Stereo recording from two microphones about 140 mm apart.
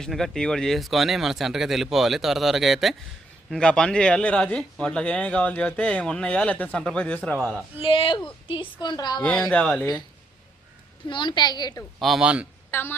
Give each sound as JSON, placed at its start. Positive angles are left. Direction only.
{"t": 0.0, "sound": "a man's voice", "side_deg": 5}
{"t": 7.8, "sound": "speech", "side_deg": 40}
{"t": 9.2, "sound": "a man's voice", "side_deg": 5}
{"t": 11.1, "sound": "speech", "side_deg": 35}
{"t": 11.9, "sound": "speech", "side_deg": 0}
{"t": 12.7, "sound": "a man's voice", "side_deg": 15}